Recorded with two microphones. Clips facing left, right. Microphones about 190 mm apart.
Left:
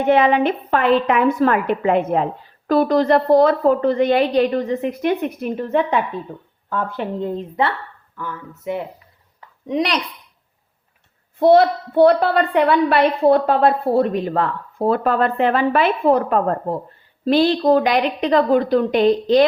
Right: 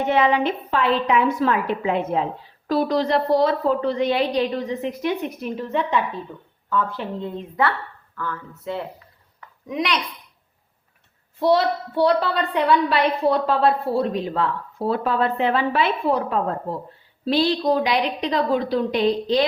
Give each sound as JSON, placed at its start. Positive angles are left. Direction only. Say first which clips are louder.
{"t": 0.1, "sound": "a woman's voice", "louder": "left 5 dB", "side_deg": 55}
{"t": 8.1, "sound": "speech", "louder": "even", "side_deg": 15}
{"t": 9.6, "sound": "a woman's voice", "louder": "left 4 dB", "side_deg": 35}
{"t": 11.3, "sound": "a woman's voice", "louder": "left 6 dB", "side_deg": 55}